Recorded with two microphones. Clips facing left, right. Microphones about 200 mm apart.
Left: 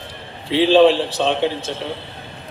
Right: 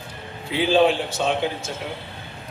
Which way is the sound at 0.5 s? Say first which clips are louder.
Left 6 dB; 30° left (ahead or behind).